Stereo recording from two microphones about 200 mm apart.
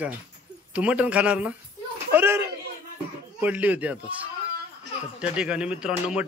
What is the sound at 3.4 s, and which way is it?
Speech, 10° right (ahead or behind).